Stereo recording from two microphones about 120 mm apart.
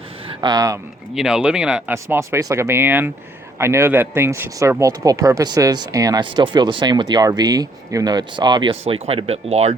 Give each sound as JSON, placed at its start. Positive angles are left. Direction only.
{"t": 0.4, "sound": "speech", "side_deg": -30}
{"t": 1.1, "sound": "speech", "side_deg": -5}
{"t": 1.9, "sound": "speech", "side_deg": -20}
{"t": 6.2, "sound": "speech", "side_deg": -45}
{"t": 8.7, "sound": "speech", "side_deg": -55}